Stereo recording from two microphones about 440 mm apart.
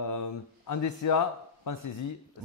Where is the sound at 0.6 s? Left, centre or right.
Left.